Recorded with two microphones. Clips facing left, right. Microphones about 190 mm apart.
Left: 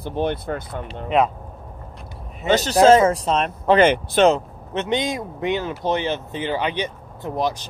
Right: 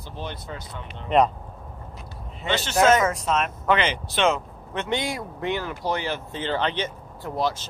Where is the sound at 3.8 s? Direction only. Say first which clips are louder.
Left 10 dB; 50° left (ahead or behind).